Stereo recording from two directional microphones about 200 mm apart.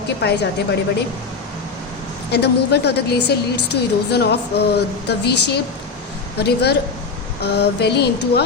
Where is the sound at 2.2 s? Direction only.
55° left (ahead or behind).